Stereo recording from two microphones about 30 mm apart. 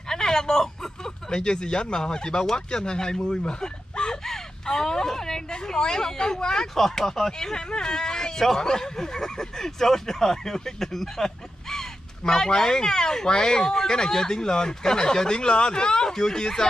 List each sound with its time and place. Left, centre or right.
0.1 s a sound: centre
1.3 s speech: left
6.7 s speech: centre; by 16.1 s left
16.1 s speech: centre